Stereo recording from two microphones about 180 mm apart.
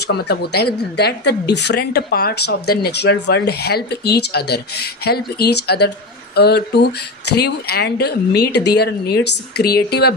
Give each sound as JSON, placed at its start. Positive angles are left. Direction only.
{"t": 0.1, "sound": "a woman's voice", "side_deg": 65}